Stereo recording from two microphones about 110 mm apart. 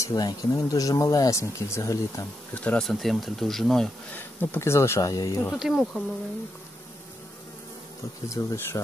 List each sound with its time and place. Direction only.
0.0 s speech: 35° left (ahead or behind)
2.5 s speech: 10° left (ahead or behind)
4.1 s speech: 15° left (ahead or behind)
5.6 s speech: centre (ahead or behind)
8.3 s speech: 30° left (ahead or behind)